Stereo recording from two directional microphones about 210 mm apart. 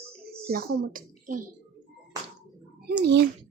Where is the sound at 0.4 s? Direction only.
45° right (ahead or behind).